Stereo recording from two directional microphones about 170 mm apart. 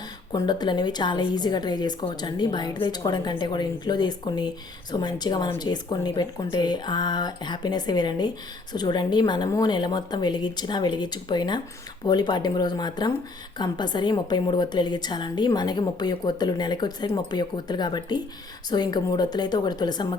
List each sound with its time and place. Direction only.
0.3 s a woman's voice: 25° left (ahead or behind)